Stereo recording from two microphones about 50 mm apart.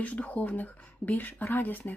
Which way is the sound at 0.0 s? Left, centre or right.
Left.